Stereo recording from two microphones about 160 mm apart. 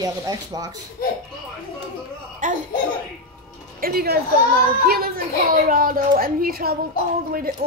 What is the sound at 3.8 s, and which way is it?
A woman's voice, 75° right (ahead or behind).